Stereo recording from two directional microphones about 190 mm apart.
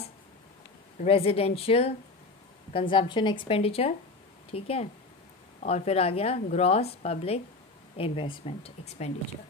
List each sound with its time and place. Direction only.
1.0 s a woman's voice: 30° left (ahead or behind)